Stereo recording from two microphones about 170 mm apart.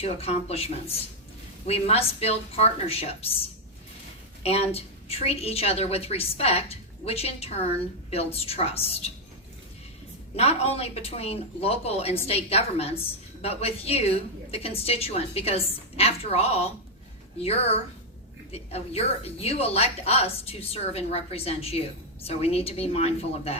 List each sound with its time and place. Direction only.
0.0 s speech: 40° left (ahead or behind)
4.4 s speech: 35° left (ahead or behind)
10.3 s speech: 40° left (ahead or behind)